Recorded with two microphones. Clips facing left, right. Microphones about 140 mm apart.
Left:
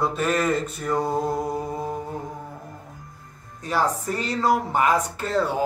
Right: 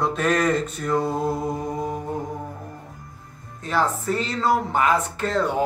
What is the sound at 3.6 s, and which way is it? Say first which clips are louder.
Speech: right 1 dB; 10° left (ahead or behind).